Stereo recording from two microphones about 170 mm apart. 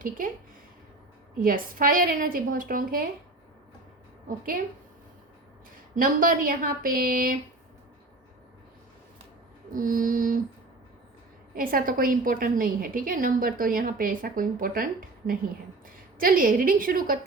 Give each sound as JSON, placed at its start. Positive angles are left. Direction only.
{"t": 1.4, "sound": "a woman's voice", "side_deg": -55}
{"t": 4.3, "sound": "a woman's voice", "side_deg": -55}
{"t": 5.9, "sound": "a woman's voice", "side_deg": -55}
{"t": 9.7, "sound": "mantra", "side_deg": -55}
{"t": 11.5, "sound": "a woman's voice", "side_deg": -55}
{"t": 16.1, "sound": "a woman's voice", "side_deg": -55}